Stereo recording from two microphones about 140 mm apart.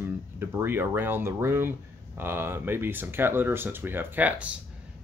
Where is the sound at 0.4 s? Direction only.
15° right (ahead or behind).